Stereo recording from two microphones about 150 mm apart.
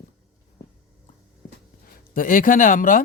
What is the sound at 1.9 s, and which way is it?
Speech, 70° left (ahead or behind).